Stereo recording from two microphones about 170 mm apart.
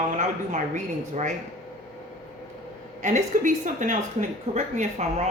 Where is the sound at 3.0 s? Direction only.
45° right (ahead or behind).